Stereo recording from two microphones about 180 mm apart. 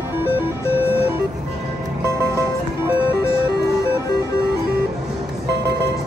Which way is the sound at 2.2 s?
15° right (ahead or behind).